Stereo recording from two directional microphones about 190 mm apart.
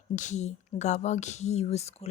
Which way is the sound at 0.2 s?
40° left (ahead or behind).